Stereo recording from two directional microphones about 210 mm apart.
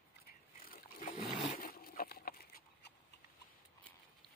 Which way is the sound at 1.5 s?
45° left (ahead or behind).